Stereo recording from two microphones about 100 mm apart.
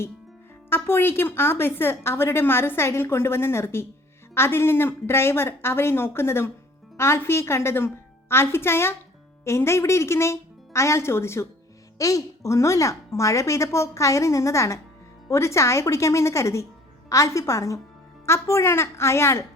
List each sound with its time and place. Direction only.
0.7 s a woman's voice: 25° left (ahead or behind)